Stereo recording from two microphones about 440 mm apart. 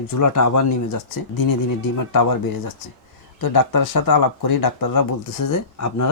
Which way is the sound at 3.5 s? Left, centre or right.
Left.